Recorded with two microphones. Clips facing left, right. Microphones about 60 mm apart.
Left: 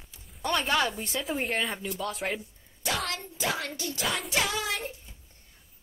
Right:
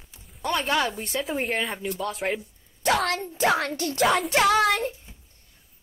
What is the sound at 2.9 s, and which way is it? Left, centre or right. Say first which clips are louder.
A woman's voice: right 8 dB; right.